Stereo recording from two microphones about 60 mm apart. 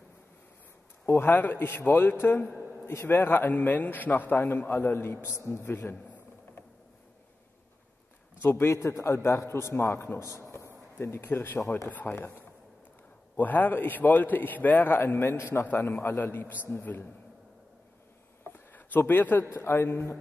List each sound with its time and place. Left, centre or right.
1.0 s speech: left
1.3 s a man's voice: left
5.6 s a man's voice: left
8.4 s a man's voice: left
10.5 s a sound: left
11.9 s speech: left
12.2 s a man's voice: left
13.4 s a man's voice: left
15.1 s a man's voice: left
18.4 s a sound: left
19.5 s a man's voice: left